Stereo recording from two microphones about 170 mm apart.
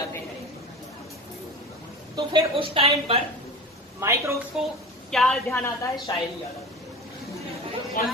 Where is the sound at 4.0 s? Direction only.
15° right (ahead or behind).